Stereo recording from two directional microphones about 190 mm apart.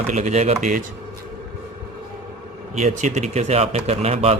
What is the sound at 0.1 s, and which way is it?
Speech, 35° right (ahead or behind).